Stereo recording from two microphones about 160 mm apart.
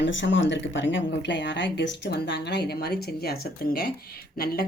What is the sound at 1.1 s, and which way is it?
Speech, 90° left.